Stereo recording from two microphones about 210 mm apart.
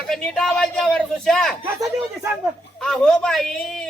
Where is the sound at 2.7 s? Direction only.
Centre (ahead or behind).